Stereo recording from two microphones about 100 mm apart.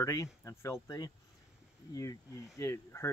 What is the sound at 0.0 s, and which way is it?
Speech, 30° left (ahead or behind).